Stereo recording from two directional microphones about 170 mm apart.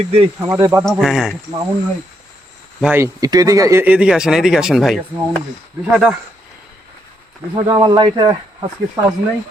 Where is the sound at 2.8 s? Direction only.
10° right (ahead or behind).